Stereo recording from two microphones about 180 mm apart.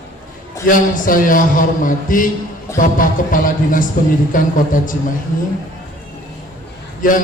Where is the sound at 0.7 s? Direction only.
50° left (ahead or behind).